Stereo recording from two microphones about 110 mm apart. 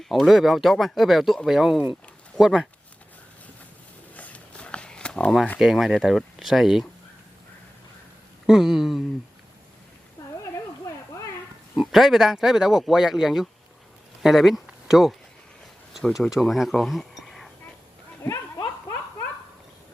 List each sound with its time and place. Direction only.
0.0 s speech: centre (ahead or behind)
4.1 s a sound: 15° left (ahead or behind)
5.5 s speech: 5° right (ahead or behind)
8.4 s speech: 5° right (ahead or behind)
10.2 s a sound: 30° left (ahead or behind)
11.8 s speech: centre (ahead or behind)
18.2 s dog: 25° left (ahead or behind)